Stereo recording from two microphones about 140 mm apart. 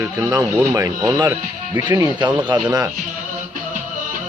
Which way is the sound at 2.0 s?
30° right (ahead or behind).